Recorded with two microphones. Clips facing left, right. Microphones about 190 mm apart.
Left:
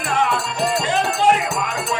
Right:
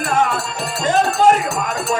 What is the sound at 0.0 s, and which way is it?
Music, 45° right (ahead or behind).